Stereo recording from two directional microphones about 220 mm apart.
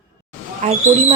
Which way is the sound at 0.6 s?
30° right (ahead or behind).